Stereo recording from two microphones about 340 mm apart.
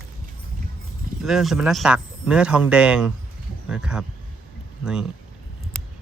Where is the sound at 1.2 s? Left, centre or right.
Centre.